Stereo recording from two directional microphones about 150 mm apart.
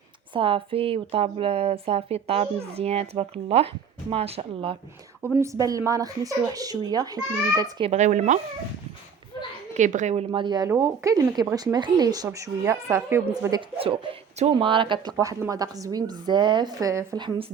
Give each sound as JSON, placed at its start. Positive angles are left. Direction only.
{"t": 0.3, "sound": "a woman's voice", "side_deg": -35}
{"t": 5.2, "sound": "speech", "side_deg": -15}
{"t": 7.8, "sound": "speech", "side_deg": -45}
{"t": 9.7, "sound": "speech", "side_deg": -55}
{"t": 10.3, "sound": "speech", "side_deg": -30}
{"t": 13.7, "sound": "a woman's voice", "side_deg": -35}
{"t": 17.2, "sound": "a woman's voice", "side_deg": -30}